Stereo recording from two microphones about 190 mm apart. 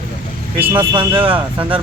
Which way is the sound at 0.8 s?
25° right (ahead or behind).